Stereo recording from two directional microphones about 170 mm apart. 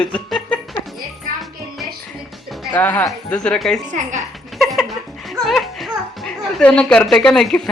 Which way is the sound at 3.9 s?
45° right (ahead or behind).